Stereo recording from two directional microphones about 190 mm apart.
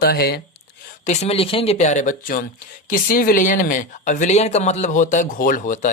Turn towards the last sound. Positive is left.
turn(degrees=40)  # may be behind; listen again after turning